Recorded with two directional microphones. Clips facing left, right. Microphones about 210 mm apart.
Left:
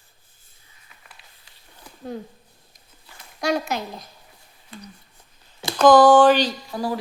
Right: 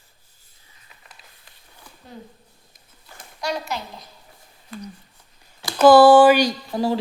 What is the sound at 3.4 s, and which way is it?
Speech, 50° left (ahead or behind).